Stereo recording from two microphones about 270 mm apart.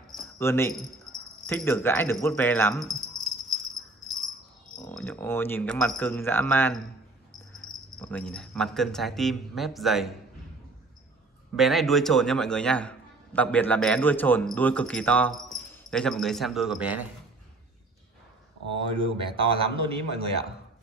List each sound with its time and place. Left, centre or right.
0.0 s jingle bell: centre
4.8 s speech: centre
11.5 s a man's voice: centre
18.9 s speech: centre